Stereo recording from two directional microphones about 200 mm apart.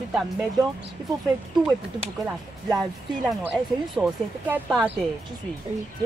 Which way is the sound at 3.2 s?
5° right (ahead or behind).